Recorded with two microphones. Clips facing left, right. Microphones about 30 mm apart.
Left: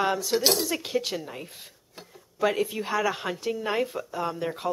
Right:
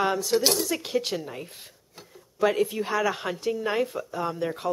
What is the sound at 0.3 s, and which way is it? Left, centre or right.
Speech, centre.